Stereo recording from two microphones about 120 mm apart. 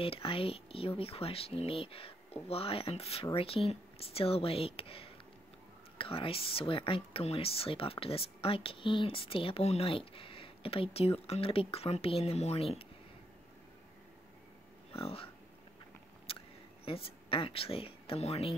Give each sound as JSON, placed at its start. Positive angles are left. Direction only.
{"t": 0.0, "sound": "speech", "side_deg": 50}
{"t": 14.9, "sound": "speech", "side_deg": 55}
{"t": 16.3, "sound": "a sound", "side_deg": 50}
{"t": 16.8, "sound": "speech", "side_deg": 50}